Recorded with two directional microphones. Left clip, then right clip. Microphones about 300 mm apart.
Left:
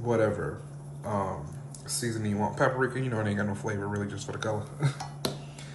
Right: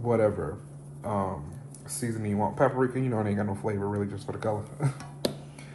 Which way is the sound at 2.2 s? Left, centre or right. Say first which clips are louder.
Right 2 dB; centre.